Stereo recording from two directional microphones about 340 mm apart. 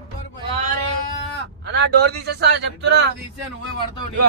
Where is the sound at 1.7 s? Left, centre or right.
Right.